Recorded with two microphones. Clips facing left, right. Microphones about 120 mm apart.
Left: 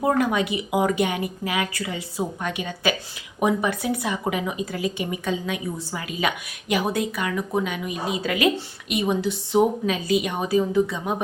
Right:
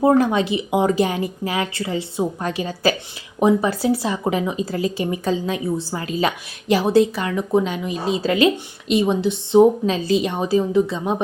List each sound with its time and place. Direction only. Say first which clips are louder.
0.0 s a woman's voice: right 5 dB; 30° right (ahead or behind)